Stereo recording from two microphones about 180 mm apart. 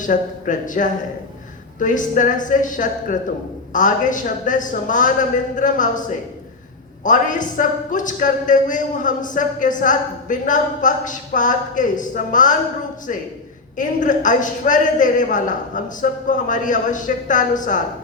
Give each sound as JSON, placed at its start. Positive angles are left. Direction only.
{"t": 0.0, "sound": "a man's voice", "side_deg": 45}
{"t": 13.7, "sound": "a man's voice", "side_deg": 45}